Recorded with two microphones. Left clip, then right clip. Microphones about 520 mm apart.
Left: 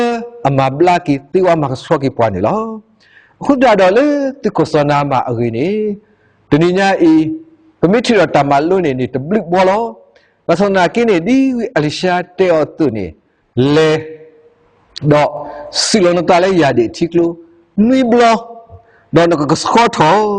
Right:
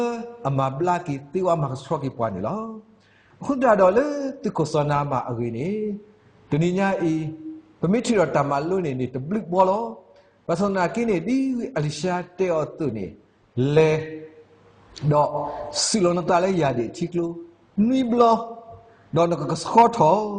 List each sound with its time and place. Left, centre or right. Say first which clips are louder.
0.0 s a man's voice: left 11 dB; left
15.7 s a man's voice: left 11 dB; left